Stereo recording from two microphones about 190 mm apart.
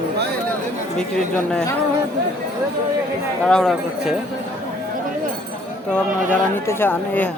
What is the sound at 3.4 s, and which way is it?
Speech, 5° left (ahead or behind).